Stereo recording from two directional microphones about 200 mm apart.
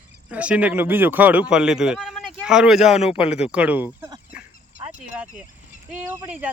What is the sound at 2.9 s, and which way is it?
Speech, 30° left (ahead or behind).